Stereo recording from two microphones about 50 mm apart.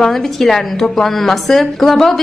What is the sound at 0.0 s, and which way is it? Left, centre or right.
A woman's voice, centre.